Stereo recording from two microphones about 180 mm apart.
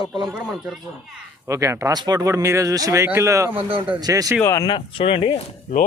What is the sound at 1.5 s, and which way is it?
Speech, 15° right (ahead or behind).